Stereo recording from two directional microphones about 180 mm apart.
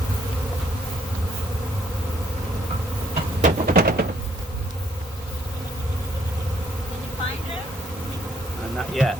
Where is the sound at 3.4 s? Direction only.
60° right (ahead or behind).